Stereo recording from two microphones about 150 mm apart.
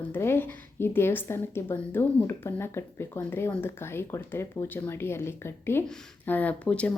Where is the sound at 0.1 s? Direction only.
15° left (ahead or behind).